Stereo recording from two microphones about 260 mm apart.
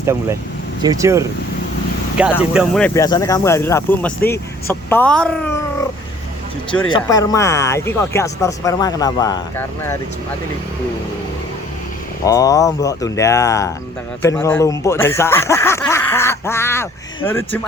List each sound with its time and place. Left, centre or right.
0.0 s speech: centre
2.5 s speech: centre
6.9 s speech: centre
12.2 s speech: centre